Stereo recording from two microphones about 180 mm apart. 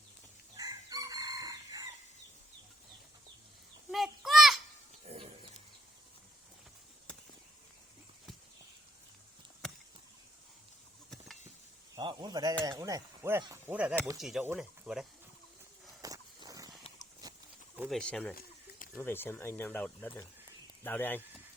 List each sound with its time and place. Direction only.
0.5 s chicken: 20° right (ahead or behind)
3.9 s a sound: centre (ahead or behind)
5.0 s a sound: 30° right (ahead or behind)
11.9 s speech: 25° right (ahead or behind)
12.6 s mechanisms: 20° right (ahead or behind)
13.4 s speech: 20° right (ahead or behind)
14.2 s speech: centre (ahead or behind)
16.0 s walk: 20° right (ahead or behind)
17.7 s speech: centre (ahead or behind)